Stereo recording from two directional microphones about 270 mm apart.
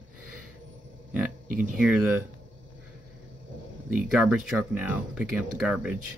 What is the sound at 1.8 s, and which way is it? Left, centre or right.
Speech, centre.